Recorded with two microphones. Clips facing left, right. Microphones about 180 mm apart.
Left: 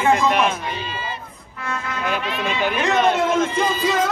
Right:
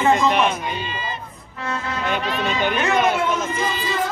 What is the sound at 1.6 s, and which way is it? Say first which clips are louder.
Music: right 1 dB; 25° right (ahead or behind).